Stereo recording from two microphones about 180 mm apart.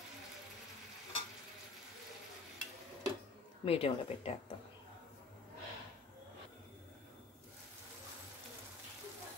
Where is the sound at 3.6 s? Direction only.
30° left (ahead or behind).